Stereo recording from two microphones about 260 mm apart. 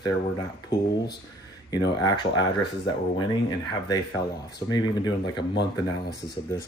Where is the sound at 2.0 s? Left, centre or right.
Centre.